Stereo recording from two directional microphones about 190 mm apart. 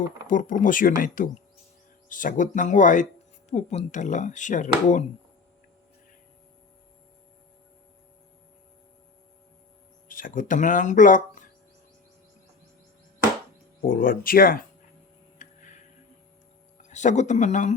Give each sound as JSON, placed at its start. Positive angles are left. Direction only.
{"t": 0.3, "sound": "speech", "side_deg": 45}
{"t": 10.1, "sound": "speech", "side_deg": 45}
{"t": 13.8, "sound": "speech", "side_deg": 45}
{"t": 15.4, "sound": "a sound", "side_deg": 40}
{"t": 16.9, "sound": "speech", "side_deg": 40}